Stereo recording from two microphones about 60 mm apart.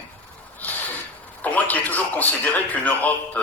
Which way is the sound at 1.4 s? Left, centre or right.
Left.